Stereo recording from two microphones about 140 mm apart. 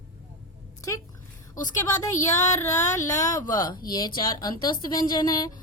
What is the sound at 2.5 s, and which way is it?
A woman's voice, 20° left (ahead or behind).